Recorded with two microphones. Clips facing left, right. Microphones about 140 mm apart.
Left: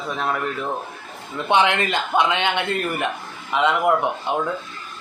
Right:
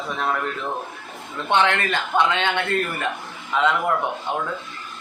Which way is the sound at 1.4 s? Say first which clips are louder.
Left 1 dB; 15° left (ahead or behind).